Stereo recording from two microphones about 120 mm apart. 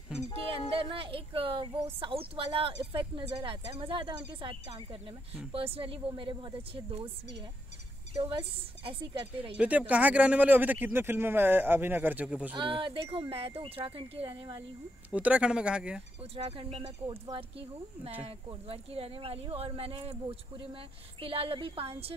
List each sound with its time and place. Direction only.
0.5 s speech: 50° right (ahead or behind)
8.2 s speech: 45° right (ahead or behind)
9.6 s speech: 10° right (ahead or behind)
12.5 s speech: 40° right (ahead or behind)
15.1 s speech: 10° right (ahead or behind)
16.3 s speech: 45° right (ahead or behind)